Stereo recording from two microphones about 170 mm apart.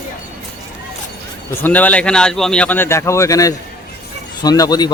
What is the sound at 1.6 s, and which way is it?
A man's voice, 10° left (ahead or behind).